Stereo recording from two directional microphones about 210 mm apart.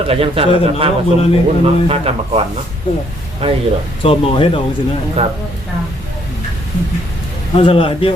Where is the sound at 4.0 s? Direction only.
25° left (ahead or behind).